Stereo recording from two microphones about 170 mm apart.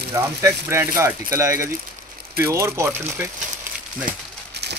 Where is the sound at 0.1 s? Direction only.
15° right (ahead or behind).